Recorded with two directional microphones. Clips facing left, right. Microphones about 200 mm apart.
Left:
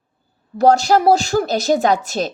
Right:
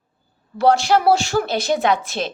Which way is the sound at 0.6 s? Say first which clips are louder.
Left 2 dB; 40° left (ahead or behind).